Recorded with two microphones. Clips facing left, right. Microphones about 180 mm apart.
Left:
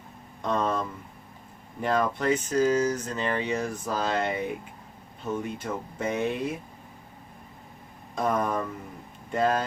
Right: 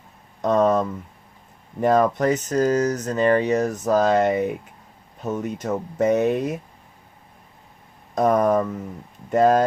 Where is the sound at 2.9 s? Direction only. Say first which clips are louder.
Right 5 dB; 70° right (ahead or behind).